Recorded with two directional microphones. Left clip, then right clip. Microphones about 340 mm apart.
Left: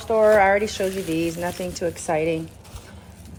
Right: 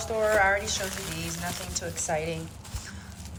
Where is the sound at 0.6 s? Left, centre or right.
Centre.